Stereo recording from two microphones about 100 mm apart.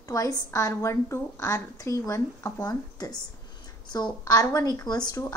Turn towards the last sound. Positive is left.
turn(degrees=40)  # may be behind; listen again after turning